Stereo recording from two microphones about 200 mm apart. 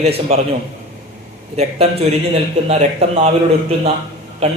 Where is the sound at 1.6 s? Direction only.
30° right (ahead or behind).